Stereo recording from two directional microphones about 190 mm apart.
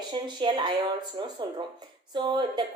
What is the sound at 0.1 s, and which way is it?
A woman's voice, 25° right (ahead or behind).